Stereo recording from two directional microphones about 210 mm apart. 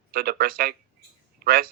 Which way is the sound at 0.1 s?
45° right (ahead or behind).